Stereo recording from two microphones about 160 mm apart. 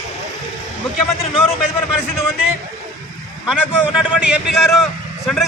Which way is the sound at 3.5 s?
5° right (ahead or behind).